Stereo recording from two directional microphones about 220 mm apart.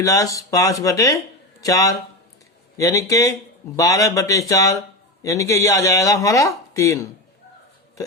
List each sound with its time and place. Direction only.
0.0 s speech: 15° left (ahead or behind)